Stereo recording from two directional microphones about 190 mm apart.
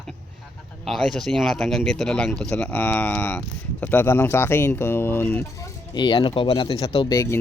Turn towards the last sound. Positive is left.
turn(degrees=15)  # may be behind; listen again after turning